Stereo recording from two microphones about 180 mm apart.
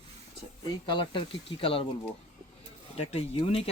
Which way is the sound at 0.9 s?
25° left (ahead or behind).